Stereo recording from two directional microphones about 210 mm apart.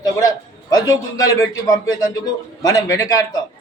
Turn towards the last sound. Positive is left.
turn(degrees=15)  # may be behind; listen again after turning